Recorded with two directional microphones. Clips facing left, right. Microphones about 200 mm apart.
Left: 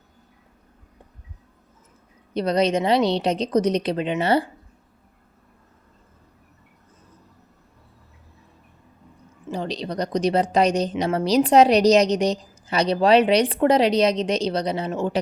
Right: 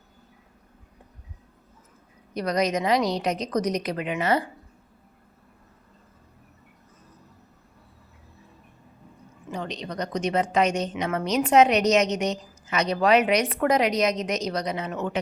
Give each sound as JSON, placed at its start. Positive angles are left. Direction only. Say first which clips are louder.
{"t": 2.3, "sound": "a woman's voice", "louder": "left 4 dB", "side_deg": 30}
{"t": 9.5, "sound": "a woman's voice", "louder": "left 5 dB", "side_deg": 35}